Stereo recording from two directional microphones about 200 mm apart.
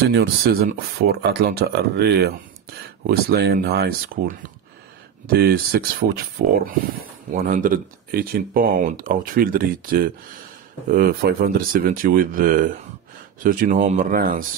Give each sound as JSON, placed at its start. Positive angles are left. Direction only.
{"t": 0.1, "sound": "speech", "side_deg": -55}